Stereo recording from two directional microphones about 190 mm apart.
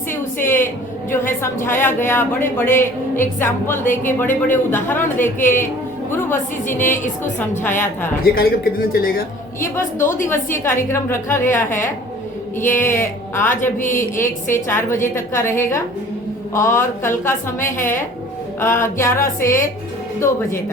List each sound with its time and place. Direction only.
0.1 s a sound: 10° left (ahead or behind)
1.1 s a woman's voice: 15° left (ahead or behind)
8.2 s a man's voice: 50° left (ahead or behind)
10.2 s a woman's voice: 15° left (ahead or behind)
12.5 s a woman's voice: 10° left (ahead or behind)
13.7 s a man's voice: 45° left (ahead or behind)
14.5 s a woman's voice: 15° left (ahead or behind)